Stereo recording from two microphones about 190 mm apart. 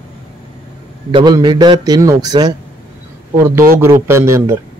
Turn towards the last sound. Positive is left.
turn(degrees=-15)  # may be behind; listen again after turning